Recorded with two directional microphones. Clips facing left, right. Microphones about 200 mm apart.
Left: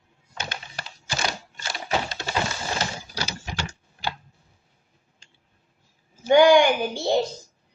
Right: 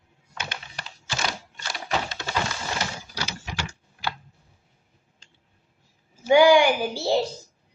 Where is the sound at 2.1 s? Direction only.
35° left (ahead or behind).